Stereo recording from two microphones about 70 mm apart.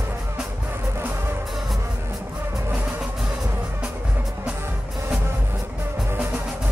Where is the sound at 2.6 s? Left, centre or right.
Right.